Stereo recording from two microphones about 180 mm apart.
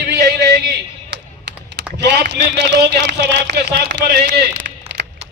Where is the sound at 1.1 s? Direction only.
75° right (ahead or behind).